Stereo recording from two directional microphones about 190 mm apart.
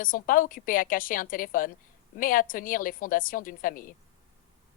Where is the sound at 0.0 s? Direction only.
45° left (ahead or behind).